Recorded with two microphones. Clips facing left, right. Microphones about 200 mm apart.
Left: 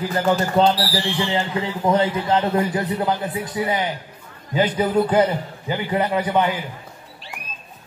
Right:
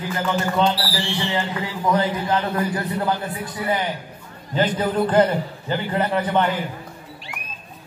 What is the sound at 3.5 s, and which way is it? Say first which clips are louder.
A man's voice: even; 20° left (ahead or behind).